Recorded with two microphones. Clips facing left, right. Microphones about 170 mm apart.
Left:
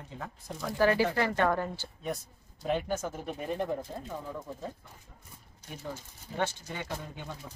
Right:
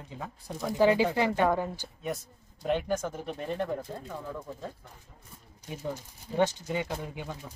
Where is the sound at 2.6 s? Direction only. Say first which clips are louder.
Right 2 dB; centre (ahead or behind).